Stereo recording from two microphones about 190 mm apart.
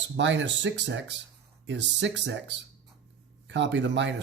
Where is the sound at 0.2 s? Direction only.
70° right (ahead or behind).